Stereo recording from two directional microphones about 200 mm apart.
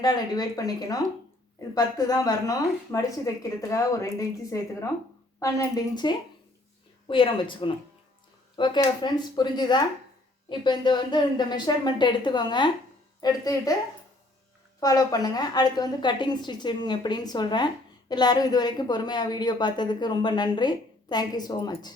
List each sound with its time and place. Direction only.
0.0 s a woman's voice: 20° left (ahead or behind)
14.8 s a woman's voice: 20° left (ahead or behind)